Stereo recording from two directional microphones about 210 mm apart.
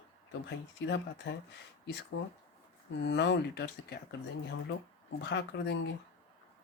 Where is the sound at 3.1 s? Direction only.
55° left (ahead or behind).